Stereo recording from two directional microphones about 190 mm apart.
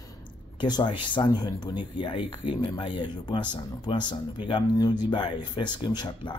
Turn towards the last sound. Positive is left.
turn(degrees=25)  # may be behind; listen again after turning